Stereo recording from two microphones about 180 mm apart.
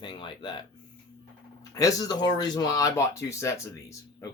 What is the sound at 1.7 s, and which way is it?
Speech, 20° left (ahead or behind).